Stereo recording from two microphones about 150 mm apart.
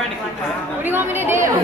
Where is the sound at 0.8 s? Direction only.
15° right (ahead or behind).